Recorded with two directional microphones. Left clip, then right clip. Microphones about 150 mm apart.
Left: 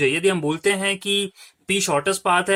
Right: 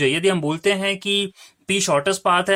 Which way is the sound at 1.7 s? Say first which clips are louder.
Right 2 dB; 25° right (ahead or behind).